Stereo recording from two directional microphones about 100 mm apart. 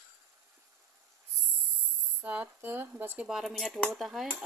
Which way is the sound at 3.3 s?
Centre (ahead or behind).